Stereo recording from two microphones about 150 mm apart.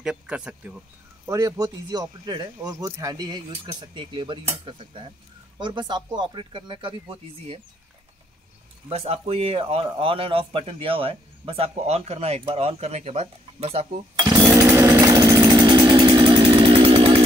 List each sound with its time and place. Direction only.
0.0 s speech: 5° right (ahead or behind)
1.2 s a man's voice: 20° right (ahead or behind); by 7.6 s 35° right (ahead or behind)
8.8 s a man's voice: 40° right (ahead or behind)
14.1 s chainsaw: 25° right (ahead or behind)